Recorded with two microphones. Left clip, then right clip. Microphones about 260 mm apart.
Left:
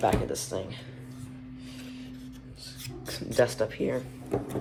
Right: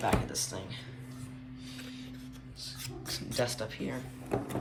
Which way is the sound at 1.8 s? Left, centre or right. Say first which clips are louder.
Left 2 dB; left.